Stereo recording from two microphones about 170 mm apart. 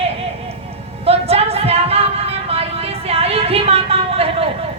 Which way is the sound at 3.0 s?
35° right (ahead or behind).